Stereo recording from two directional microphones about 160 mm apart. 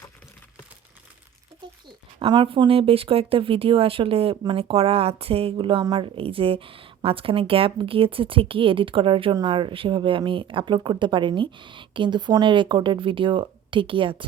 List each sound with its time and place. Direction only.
2.1 s speech: 30° right (ahead or behind)